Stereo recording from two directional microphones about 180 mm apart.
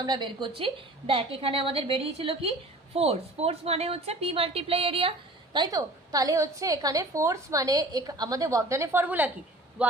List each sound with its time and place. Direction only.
0.0 s a woman's voice: 25° right (ahead or behind)
5.5 s a woman's voice: 20° right (ahead or behind)